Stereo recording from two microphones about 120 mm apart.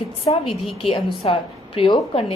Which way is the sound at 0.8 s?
50° left (ahead or behind).